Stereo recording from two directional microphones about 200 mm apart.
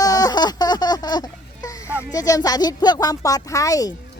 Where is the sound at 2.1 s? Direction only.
15° left (ahead or behind).